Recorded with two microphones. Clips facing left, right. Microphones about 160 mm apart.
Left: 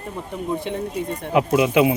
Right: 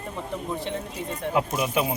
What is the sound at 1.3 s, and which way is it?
Speech, 80° left.